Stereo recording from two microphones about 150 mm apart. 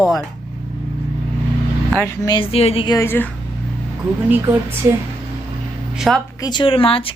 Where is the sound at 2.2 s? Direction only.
35° left (ahead or behind).